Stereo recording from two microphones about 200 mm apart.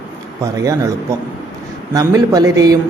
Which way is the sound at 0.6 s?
15° right (ahead or behind).